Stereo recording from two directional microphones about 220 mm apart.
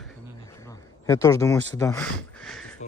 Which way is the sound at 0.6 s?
15° left (ahead or behind).